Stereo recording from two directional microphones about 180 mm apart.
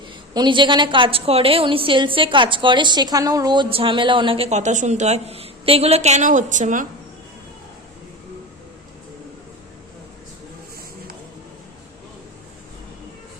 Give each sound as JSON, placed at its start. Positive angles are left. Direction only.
{"t": 0.3, "sound": "a woman's voice", "side_deg": -25}